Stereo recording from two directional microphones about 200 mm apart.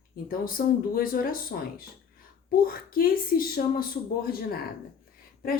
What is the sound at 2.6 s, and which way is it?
Speech, 45° left (ahead or behind).